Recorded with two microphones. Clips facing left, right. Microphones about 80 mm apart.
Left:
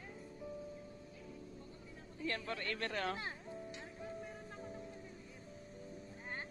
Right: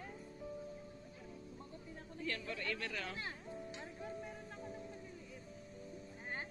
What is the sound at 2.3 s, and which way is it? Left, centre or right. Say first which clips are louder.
Speech: left 1 dB; left.